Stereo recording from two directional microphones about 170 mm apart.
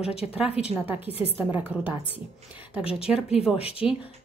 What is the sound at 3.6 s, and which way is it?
Speech, 35° left (ahead or behind).